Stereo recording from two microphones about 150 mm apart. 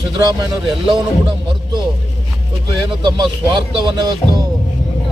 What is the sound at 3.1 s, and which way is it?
Speech, 30° right (ahead or behind).